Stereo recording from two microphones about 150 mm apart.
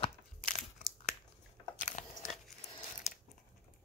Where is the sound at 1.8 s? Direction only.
55° left (ahead or behind).